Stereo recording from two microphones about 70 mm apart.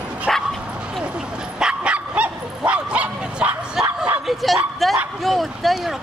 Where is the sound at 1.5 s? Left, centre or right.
Centre.